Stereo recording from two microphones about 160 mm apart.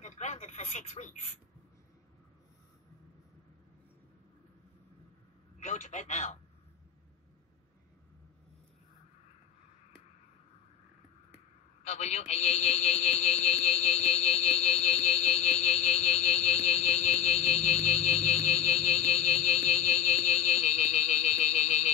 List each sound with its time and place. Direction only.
0.0 s radio: 45° left (ahead or behind)
5.6 s a man's voice: 50° left (ahead or behind)
11.3 s a sound: 45° left (ahead or behind)